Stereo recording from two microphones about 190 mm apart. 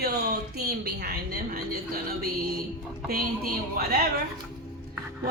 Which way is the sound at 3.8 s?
50° right (ahead or behind).